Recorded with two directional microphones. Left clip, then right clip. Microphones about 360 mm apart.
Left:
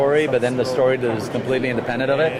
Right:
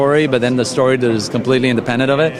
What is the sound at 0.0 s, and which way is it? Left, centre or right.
Speech, right.